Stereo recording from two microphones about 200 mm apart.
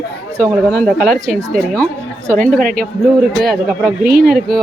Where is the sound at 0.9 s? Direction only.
Centre (ahead or behind).